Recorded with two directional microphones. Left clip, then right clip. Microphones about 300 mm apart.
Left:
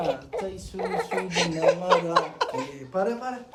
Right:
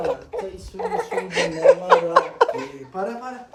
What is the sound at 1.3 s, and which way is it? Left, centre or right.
Speech, centre.